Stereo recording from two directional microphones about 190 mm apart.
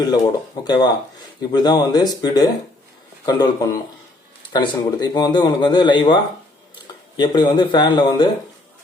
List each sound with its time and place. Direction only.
0.6 s speech: 20° left (ahead or behind)
7.2 s speech: 25° left (ahead or behind)